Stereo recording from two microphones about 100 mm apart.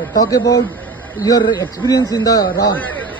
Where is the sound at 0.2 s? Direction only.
35° left (ahead or behind).